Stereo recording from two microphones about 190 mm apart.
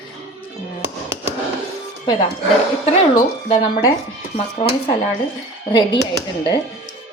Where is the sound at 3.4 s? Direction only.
30° left (ahead or behind).